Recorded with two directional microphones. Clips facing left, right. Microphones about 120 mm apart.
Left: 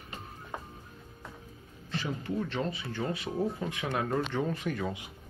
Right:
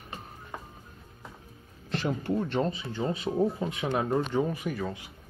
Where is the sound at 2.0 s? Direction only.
45° right (ahead or behind).